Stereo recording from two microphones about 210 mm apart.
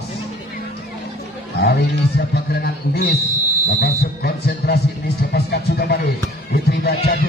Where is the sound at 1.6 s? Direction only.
50° left (ahead or behind).